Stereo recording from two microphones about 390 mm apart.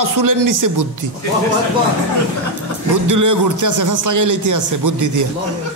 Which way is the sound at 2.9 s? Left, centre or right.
Right.